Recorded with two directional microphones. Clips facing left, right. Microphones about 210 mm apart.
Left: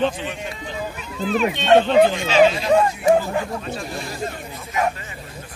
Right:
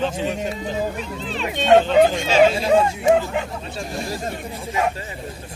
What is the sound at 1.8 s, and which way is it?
Speech, 45° right (ahead or behind).